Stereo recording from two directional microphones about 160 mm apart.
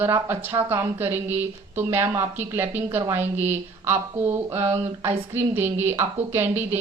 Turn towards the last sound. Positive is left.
turn(degrees=-15)  # may be behind; listen again after turning